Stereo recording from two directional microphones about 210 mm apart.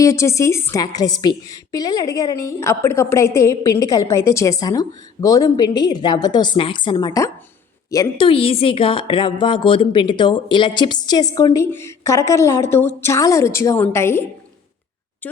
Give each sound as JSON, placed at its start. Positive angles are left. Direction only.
{"t": 0.0, "sound": "a woman's voice", "side_deg": 15}